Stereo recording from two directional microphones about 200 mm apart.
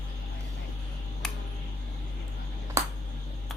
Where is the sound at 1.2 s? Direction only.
5° left (ahead or behind).